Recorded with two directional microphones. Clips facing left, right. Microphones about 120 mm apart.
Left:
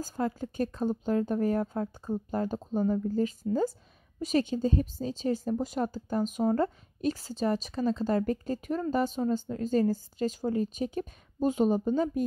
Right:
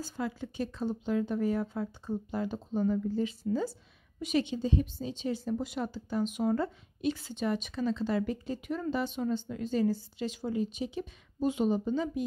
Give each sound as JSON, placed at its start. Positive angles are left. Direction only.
{"t": 0.0, "sound": "a woman's voice", "side_deg": 45}